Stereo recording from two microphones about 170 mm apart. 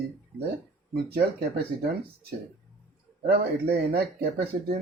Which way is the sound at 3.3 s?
70° right (ahead or behind).